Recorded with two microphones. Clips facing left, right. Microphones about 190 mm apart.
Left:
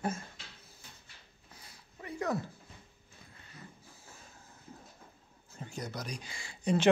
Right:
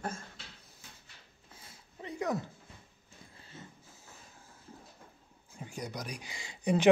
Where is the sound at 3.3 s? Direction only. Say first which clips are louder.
Right 2 dB; 25° right (ahead or behind).